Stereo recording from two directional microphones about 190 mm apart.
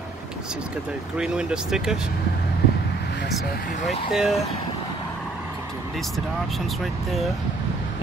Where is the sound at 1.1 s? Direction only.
5° right (ahead or behind).